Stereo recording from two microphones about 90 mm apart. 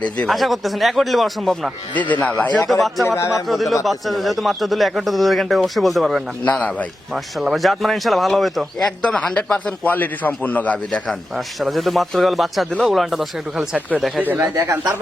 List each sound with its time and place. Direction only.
0.3 s speech: centre (ahead or behind)
2.0 s a man's voice: 15° left (ahead or behind)
2.6 s speech: centre (ahead or behind)
3.2 s speech: 35° left (ahead or behind)
3.4 s speech: centre (ahead or behind)
6.4 s a man's voice: 15° left (ahead or behind)
7.1 s speech: centre (ahead or behind); by 11.1 s 15° left (ahead or behind)
11.1 s speech: centre (ahead or behind)
14.2 s speech: 20° right (ahead or behind)
14.5 s speech: 35° right (ahead or behind)